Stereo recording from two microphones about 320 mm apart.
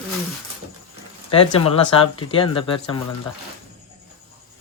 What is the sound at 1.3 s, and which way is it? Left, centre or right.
Speech, centre.